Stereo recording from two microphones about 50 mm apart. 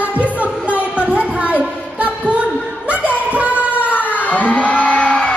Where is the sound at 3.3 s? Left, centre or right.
Right.